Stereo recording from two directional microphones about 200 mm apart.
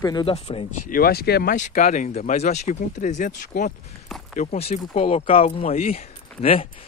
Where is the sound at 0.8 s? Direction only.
45° left (ahead or behind).